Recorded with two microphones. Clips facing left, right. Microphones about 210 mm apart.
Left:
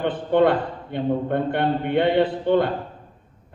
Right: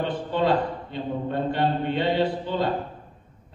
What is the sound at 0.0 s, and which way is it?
A man's voice, 60° left (ahead or behind).